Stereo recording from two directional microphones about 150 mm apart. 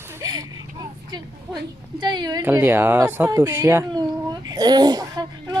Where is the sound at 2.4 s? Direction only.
10° right (ahead or behind).